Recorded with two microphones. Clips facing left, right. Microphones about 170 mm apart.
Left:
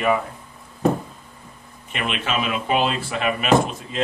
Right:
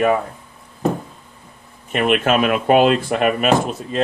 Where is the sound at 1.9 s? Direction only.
50° right (ahead or behind).